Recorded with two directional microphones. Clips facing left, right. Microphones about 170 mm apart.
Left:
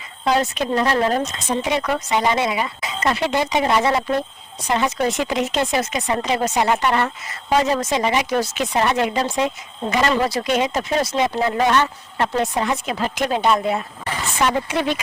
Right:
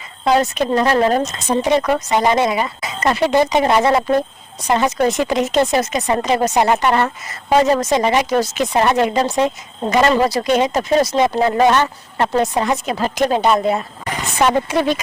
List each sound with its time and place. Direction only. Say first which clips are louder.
0.3 s speech: right 4 dB; 45° right (ahead or behind)